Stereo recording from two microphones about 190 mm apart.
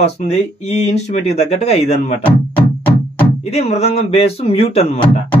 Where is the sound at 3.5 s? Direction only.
35° left (ahead or behind).